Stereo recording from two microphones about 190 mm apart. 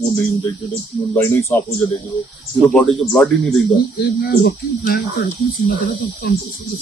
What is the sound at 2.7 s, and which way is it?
Speech, 5° left (ahead or behind).